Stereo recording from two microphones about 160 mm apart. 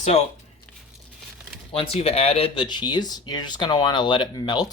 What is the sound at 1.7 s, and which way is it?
Speech, 35° left (ahead or behind).